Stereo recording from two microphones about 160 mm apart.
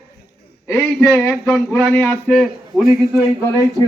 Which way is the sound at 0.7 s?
10° left (ahead or behind).